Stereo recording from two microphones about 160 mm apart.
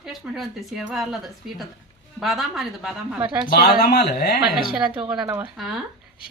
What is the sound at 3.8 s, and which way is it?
Speech, 90° left.